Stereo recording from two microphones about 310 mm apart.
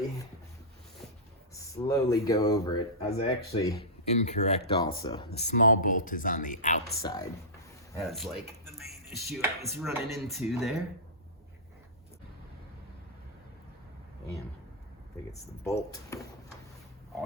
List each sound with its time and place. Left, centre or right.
1.5 s speech: centre; by 7.0 s left
7.0 s speech: centre
7.9 s speech: centre
15.3 s speech: centre